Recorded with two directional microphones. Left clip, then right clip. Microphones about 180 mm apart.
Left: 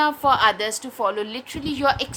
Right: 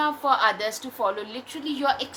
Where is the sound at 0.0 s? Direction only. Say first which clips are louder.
Left 4 dB; 45° left (ahead or behind).